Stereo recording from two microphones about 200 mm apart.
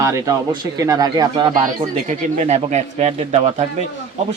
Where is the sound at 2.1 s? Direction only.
35° right (ahead or behind).